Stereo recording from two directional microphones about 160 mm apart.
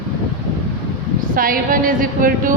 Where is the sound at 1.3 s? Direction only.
60° right (ahead or behind).